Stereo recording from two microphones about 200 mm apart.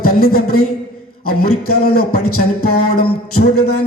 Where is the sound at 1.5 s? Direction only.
90° left.